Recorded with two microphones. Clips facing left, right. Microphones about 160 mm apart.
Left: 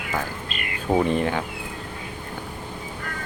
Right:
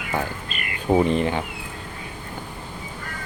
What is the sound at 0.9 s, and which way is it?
Speech, 5° right (ahead or behind).